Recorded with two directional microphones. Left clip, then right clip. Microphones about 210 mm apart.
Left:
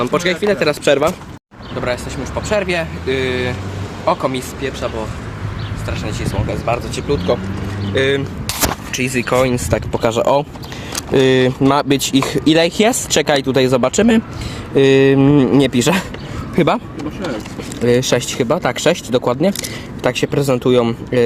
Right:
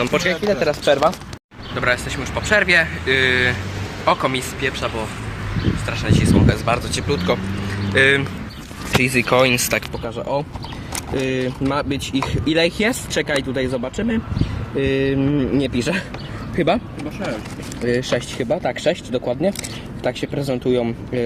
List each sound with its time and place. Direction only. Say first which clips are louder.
0.0 s speech: left 2 dB; 10° left (ahead or behind)
0.4 s speech: left 4 dB; 30° left (ahead or behind)
1.8 s speech: right 1 dB; 10° left (ahead or behind)
6.1 s speech: right 4 dB; 5° left (ahead or behind)
9.2 s speech: left 2 dB; centre (ahead or behind)
10.0 s speech: left 9 dB; 50° left (ahead or behind)
17.8 s speech: left 6 dB; 45° left (ahead or behind)